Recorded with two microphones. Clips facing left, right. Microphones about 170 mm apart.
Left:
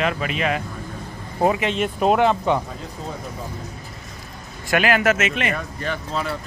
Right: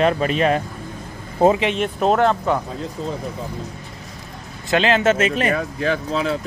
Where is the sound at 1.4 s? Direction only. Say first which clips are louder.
Right 4 dB; 25° right (ahead or behind).